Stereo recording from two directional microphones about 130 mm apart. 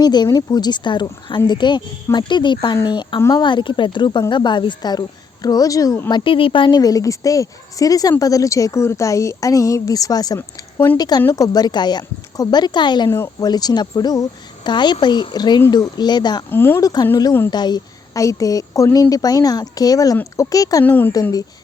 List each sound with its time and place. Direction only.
0.0 s speech: 35° left (ahead or behind)
3.2 s speech: 25° left (ahead or behind)
3.4 s speech: 40° left (ahead or behind)
13.1 s speech: 20° left (ahead or behind)
16.5 s speech: 15° left (ahead or behind)
17.5 s a woman's voice: 35° left (ahead or behind)
20.8 s speech: 15° left (ahead or behind)
21.1 s speech: 30° left (ahead or behind)